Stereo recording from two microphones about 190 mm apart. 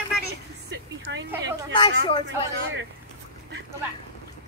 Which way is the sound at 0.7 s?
70° right (ahead or behind).